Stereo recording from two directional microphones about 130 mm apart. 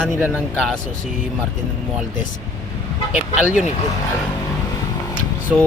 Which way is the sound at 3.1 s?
65° left (ahead or behind).